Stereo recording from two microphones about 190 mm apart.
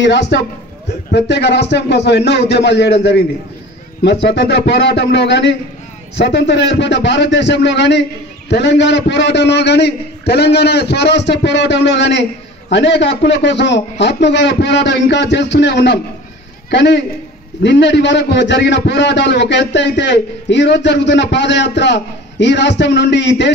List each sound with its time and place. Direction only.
0.0 s a man's voice: 65° left (ahead or behind)